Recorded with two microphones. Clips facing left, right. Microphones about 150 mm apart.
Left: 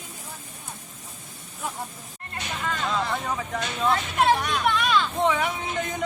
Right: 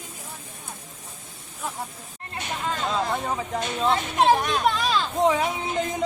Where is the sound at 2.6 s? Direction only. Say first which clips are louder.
Right 1 dB; 25° right (ahead or behind).